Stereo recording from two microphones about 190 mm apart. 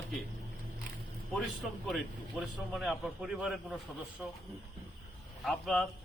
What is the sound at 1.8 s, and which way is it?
A man's voice, centre (ahead or behind).